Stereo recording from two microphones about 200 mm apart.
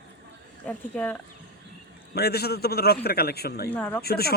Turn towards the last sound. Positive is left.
turn(degrees=50)  # may be behind; listen again after turning